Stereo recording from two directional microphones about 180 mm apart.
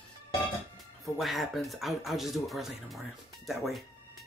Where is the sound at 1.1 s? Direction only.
Centre (ahead or behind).